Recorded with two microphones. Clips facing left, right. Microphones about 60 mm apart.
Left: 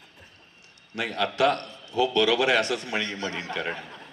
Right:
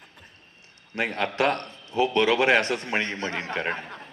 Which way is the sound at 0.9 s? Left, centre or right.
Right.